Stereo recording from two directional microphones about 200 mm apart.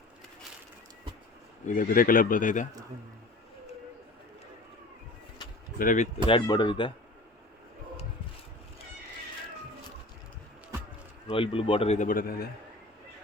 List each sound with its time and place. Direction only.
1.6 s speech: 40° left (ahead or behind)
5.8 s speech: 40° left (ahead or behind)
6.2 s speech: 25° left (ahead or behind)
11.3 s speech: 25° left (ahead or behind); by 12.5 s 50° left (ahead or behind)